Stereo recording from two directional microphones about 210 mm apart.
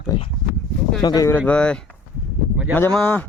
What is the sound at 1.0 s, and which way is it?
A man's voice, 15° left (ahead or behind).